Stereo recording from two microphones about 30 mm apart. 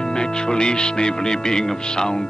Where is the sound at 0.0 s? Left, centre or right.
Left.